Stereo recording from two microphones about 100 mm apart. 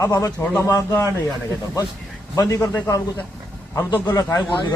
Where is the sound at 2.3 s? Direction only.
30° left (ahead or behind).